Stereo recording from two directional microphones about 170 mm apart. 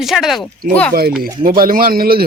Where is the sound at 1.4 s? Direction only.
55° right (ahead or behind).